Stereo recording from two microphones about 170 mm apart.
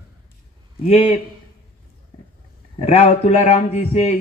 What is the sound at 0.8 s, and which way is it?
Speech, 35° left (ahead or behind).